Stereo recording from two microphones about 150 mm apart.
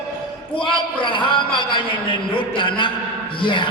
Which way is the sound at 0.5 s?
35° left (ahead or behind).